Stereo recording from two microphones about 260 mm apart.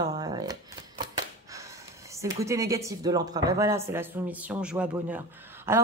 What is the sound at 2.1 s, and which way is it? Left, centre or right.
Speech, centre.